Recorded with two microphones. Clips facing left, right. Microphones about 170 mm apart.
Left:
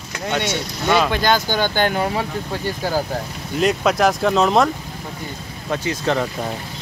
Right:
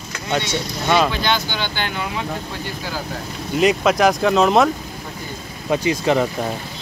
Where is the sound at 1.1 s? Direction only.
45° left (ahead or behind).